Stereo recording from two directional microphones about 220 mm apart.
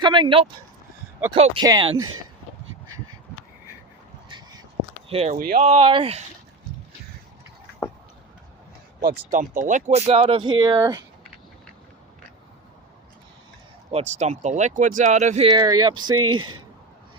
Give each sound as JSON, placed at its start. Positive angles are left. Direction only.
{"t": 0.0, "sound": "speech", "side_deg": -20}
{"t": 1.6, "sound": "speech", "side_deg": -20}
{"t": 4.3, "sound": "a sound", "side_deg": -20}
{"t": 5.0, "sound": "speech", "side_deg": -30}
{"t": 9.0, "sound": "speech", "side_deg": -40}
{"t": 13.9, "sound": "speech", "side_deg": -30}